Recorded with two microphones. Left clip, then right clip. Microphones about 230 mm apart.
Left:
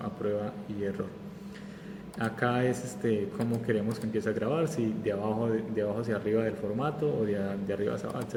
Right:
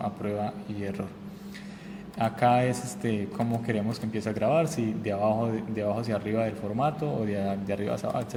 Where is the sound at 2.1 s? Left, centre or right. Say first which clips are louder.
Right 7 dB; right.